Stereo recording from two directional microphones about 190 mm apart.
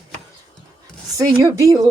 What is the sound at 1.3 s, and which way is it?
Speech, 15° right (ahead or behind).